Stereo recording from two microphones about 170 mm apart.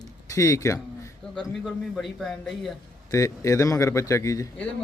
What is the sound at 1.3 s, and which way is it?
A man's voice, centre (ahead or behind).